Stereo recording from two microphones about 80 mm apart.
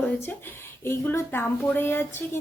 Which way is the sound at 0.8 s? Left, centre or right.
Left.